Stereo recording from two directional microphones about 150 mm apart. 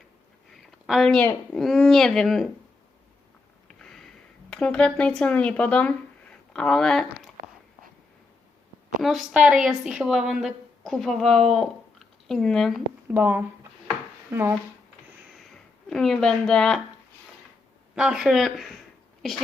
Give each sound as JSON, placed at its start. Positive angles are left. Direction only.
{"t": 0.5, "sound": "a sound", "side_deg": 0}
{"t": 1.5, "sound": "a woman's voice", "side_deg": 5}
{"t": 3.8, "sound": "a woman's voice", "side_deg": 5}
{"t": 9.0, "sound": "a woman's voice", "side_deg": 0}
{"t": 13.1, "sound": "speech", "side_deg": -10}
{"t": 15.4, "sound": "speech", "side_deg": 0}
{"t": 17.9, "sound": "a woman's voice", "side_deg": -5}